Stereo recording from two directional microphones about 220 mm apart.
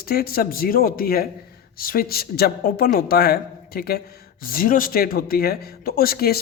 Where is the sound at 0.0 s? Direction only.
45° left (ahead or behind).